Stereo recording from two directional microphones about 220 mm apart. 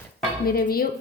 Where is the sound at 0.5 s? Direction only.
45° left (ahead or behind).